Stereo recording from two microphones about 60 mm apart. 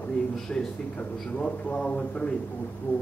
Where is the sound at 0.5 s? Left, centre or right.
Centre.